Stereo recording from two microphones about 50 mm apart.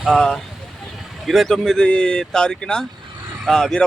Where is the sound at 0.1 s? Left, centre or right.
Centre.